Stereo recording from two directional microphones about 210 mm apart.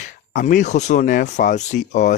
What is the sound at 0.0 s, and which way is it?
Speech, 40° left (ahead or behind).